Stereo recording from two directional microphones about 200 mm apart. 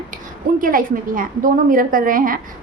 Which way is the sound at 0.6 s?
45° right (ahead or behind).